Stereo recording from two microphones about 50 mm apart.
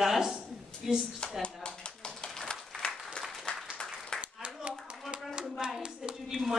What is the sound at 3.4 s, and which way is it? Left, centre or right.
Applause, centre.